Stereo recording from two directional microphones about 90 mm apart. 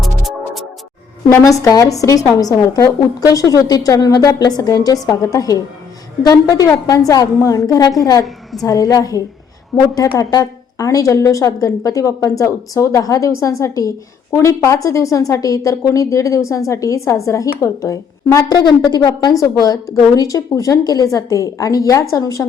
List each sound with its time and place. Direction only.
0.0 s music: centre (ahead or behind)
1.3 s a woman's voice: 40° left (ahead or behind)